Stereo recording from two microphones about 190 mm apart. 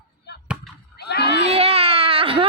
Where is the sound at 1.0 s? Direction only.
60° left (ahead or behind).